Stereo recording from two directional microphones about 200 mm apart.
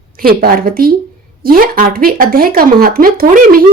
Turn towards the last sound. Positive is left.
turn(degrees=-45)  # may be behind; listen again after turning